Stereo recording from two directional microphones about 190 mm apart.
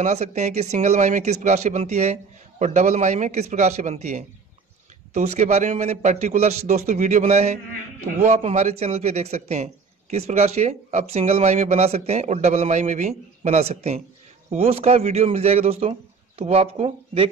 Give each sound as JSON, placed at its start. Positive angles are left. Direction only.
{"t": 0.0, "sound": "a man's voice", "side_deg": -35}